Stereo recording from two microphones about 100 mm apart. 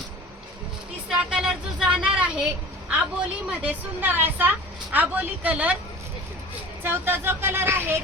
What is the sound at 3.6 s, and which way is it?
A woman's voice, 20° right (ahead or behind).